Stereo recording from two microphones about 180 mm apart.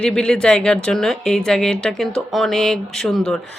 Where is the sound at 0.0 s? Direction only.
5° left (ahead or behind).